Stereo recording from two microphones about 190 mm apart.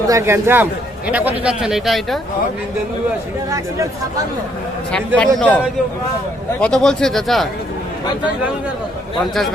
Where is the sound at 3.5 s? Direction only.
15° right (ahead or behind).